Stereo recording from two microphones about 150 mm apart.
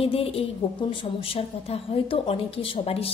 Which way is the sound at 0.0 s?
40° left (ahead or behind).